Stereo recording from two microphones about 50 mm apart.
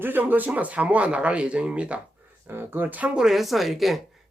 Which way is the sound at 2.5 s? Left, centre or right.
Right.